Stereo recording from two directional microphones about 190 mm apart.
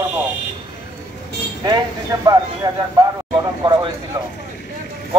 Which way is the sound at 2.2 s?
20° right (ahead or behind).